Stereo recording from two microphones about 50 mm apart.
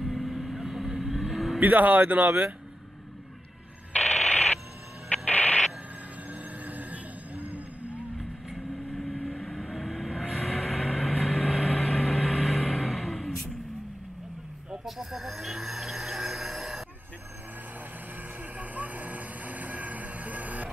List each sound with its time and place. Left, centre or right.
0.0 s vehicle: centre
1.7 s a man's voice: right
3.9 s a sound: left
6.3 s music: right
8.5 s vehicle: centre
14.9 s music: centre
18.6 s vehicle: right